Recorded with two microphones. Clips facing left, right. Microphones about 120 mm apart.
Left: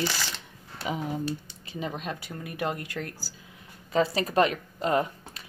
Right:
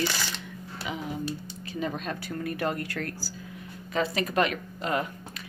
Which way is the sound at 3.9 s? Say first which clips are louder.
Left 3 dB; 30° left (ahead or behind).